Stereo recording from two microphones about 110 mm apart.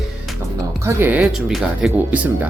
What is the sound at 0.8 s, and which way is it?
Speech, 20° right (ahead or behind).